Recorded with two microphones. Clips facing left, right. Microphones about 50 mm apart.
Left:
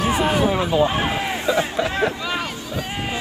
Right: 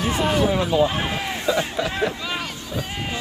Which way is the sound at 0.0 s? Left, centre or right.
Centre.